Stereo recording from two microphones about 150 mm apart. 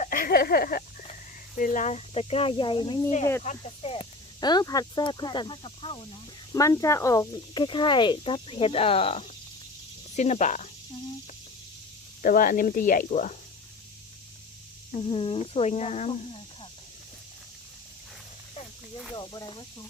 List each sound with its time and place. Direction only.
0.0 s a sound: 65° left (ahead or behind)
1.5 s speech: 60° left (ahead or behind); by 3.0 s 30° left (ahead or behind)
3.4 s speech: 50° left (ahead or behind)
3.9 s speech: 30° left (ahead or behind)
6.5 s speech: 20° left (ahead or behind); by 9.2 s 40° left (ahead or behind)
10.2 s speech: 50° left (ahead or behind)
12.2 s speech: 65° left (ahead or behind)
14.9 s speech: 35° left (ahead or behind)
19.1 s speech: 30° left (ahead or behind)